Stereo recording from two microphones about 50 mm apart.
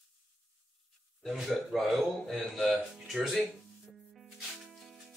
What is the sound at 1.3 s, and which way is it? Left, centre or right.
Speech, centre.